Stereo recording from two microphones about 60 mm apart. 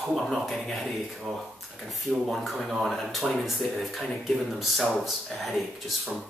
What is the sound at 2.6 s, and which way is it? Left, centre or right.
Speech, centre.